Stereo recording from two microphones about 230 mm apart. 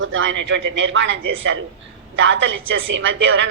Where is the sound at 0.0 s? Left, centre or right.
Right.